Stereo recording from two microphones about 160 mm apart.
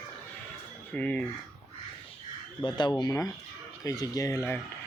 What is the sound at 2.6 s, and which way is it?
Speech, 30° left (ahead or behind).